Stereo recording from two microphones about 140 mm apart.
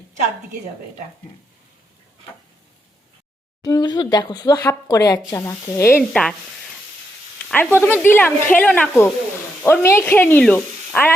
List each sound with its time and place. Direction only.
3.6 s speech: 25° left (ahead or behind)
6.0 s sizzle: 5° left (ahead or behind)
7.4 s speech: 10° left (ahead or behind)